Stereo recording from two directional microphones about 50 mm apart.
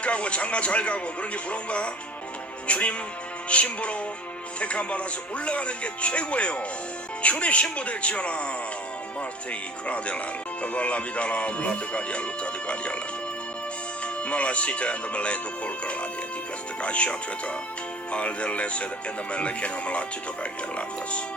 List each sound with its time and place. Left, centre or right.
0.0 s speech: left
2.6 s music: left
3.5 s speech: left
14.0 s speech: left